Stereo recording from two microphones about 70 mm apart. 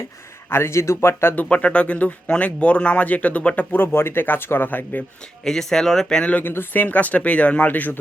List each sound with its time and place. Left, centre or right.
0.5 s speech: left
1.5 s speech: centre
5.5 s speech: centre
6.4 s speech: left